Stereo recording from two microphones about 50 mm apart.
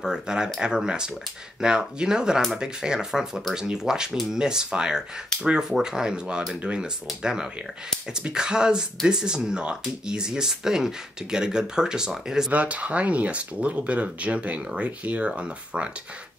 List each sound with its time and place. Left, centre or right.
0.0 s speech: centre
12.4 s speech: right